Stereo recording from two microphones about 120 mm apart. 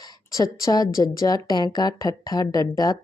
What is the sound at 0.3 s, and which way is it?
A woman's voice, 30° left (ahead or behind).